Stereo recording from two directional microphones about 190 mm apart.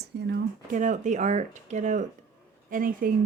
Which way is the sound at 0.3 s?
45° right (ahead or behind).